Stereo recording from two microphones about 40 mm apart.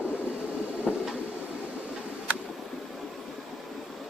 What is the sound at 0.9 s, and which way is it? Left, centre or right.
Train, left.